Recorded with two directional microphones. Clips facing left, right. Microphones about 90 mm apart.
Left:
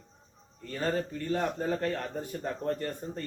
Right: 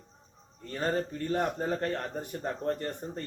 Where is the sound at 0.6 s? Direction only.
25° right (ahead or behind).